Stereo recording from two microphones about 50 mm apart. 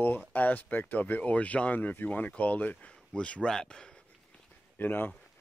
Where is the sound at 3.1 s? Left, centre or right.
Centre.